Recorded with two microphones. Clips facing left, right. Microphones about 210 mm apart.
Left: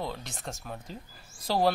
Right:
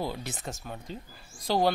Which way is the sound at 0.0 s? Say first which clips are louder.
Right 2 dB; 5° right (ahead or behind).